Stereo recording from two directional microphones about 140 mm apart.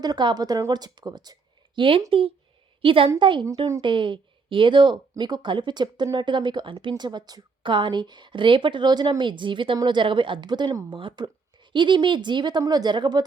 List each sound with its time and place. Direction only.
0.0 s a woman's voice: 30° right (ahead or behind)